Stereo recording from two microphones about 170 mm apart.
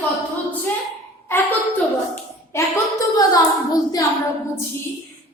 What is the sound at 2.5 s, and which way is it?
Speech, 20° left (ahead or behind).